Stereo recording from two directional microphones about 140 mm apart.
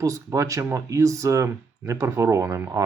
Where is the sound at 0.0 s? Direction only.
20° right (ahead or behind).